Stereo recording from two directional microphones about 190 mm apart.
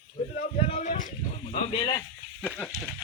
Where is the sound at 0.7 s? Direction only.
45° left (ahead or behind).